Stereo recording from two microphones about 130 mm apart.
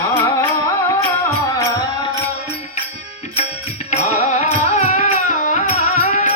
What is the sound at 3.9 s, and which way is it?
Music, 65° left (ahead or behind).